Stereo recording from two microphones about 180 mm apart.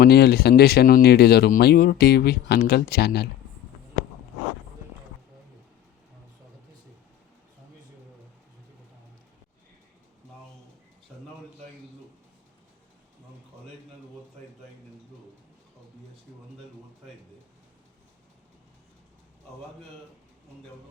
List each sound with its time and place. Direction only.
0.0 s speech: 60° left (ahead or behind)